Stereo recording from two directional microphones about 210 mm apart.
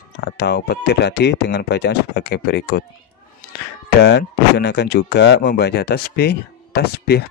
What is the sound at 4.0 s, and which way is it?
Speech, 55° left (ahead or behind).